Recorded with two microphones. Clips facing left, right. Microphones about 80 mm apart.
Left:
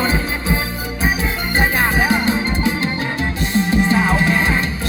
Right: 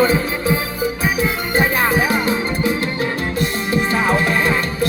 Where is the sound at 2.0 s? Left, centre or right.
Left.